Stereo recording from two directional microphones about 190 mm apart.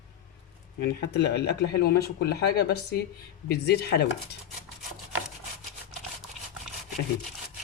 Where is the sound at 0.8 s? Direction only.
60° left (ahead or behind).